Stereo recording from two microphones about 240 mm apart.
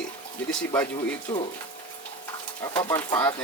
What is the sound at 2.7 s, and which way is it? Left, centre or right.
Speech, centre.